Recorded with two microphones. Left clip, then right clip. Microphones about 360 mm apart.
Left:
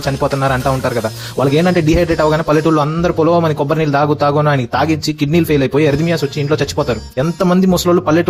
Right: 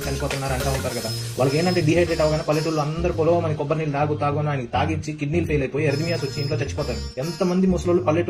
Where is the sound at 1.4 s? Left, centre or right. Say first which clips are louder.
Left 8 dB; left.